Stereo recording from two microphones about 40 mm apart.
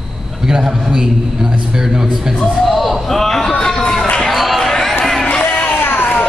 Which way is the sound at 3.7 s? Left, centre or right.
Left.